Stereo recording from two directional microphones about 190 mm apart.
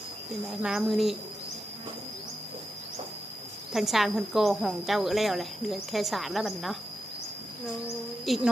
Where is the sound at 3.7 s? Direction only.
Centre (ahead or behind).